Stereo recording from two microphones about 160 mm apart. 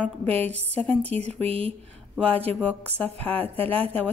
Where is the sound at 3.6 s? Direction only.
35° right (ahead or behind).